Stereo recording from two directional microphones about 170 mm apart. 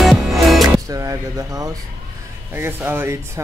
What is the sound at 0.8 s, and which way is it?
Speech, 20° right (ahead or behind).